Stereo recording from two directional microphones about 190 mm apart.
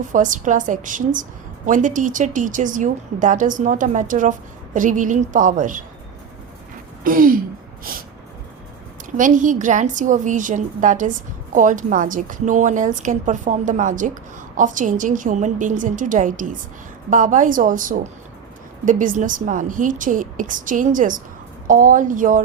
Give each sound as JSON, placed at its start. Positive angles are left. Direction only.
{"t": 0.1, "sound": "a woman's voice", "side_deg": -40}
{"t": 7.0, "sound": "a woman's voice", "side_deg": -45}
{"t": 9.1, "sound": "a woman's voice", "side_deg": -45}